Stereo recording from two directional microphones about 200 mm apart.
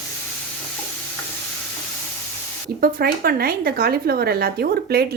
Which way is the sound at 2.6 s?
50° right (ahead or behind).